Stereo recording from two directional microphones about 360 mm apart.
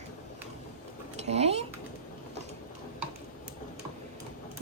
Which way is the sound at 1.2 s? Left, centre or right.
Centre.